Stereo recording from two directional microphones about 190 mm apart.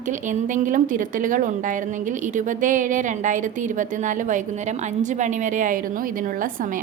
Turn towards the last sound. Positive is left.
turn(degrees=-45)  # may be behind; listen again after turning